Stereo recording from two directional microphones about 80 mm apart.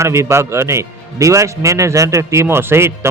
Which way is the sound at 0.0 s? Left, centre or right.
Right.